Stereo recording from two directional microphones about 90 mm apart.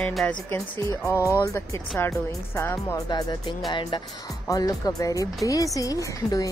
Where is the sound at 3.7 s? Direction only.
60° left (ahead or behind).